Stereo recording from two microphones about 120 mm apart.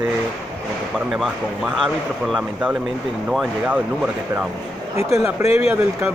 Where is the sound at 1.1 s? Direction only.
5° right (ahead or behind).